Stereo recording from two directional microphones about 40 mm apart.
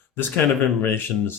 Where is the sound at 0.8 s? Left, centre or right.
Left.